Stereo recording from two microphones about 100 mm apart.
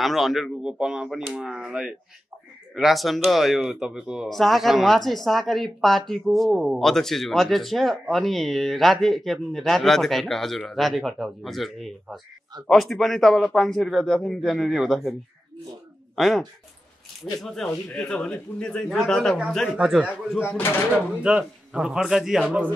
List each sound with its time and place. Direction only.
0.0 s speech: centre (ahead or behind)
16.2 s speech: centre (ahead or behind)
19.8 s a man's voice: 10° right (ahead or behind)
20.4 s speech: 25° left (ahead or behind)
21.2 s speech: 10° right (ahead or behind)